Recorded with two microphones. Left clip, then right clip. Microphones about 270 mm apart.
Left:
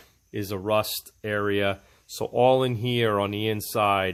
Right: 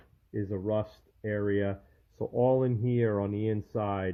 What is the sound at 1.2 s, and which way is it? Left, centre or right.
Speech, left.